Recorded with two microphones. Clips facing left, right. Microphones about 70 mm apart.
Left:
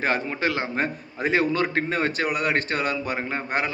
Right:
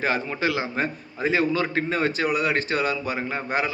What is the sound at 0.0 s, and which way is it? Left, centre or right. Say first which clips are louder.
A man's voice: even; left.